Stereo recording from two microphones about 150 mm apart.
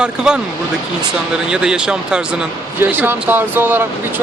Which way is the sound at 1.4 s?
5° right (ahead or behind).